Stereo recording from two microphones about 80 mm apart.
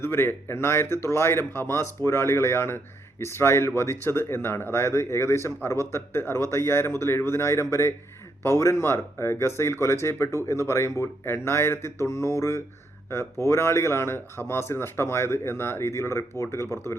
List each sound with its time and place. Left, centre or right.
0.0 s speech: left